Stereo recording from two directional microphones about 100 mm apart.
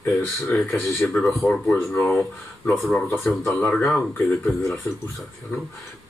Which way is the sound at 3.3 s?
Centre (ahead or behind).